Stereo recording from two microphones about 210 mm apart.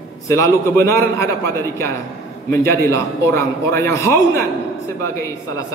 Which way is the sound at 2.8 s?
15° left (ahead or behind).